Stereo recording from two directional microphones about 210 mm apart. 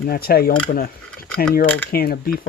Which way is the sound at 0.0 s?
45° left (ahead or behind).